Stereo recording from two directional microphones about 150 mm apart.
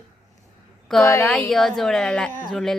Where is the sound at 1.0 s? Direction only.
20° left (ahead or behind).